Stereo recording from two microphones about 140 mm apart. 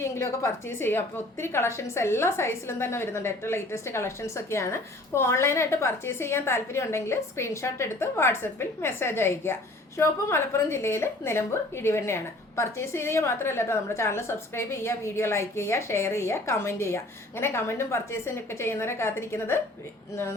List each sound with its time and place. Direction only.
0.0 s a woman's voice: 20° left (ahead or behind)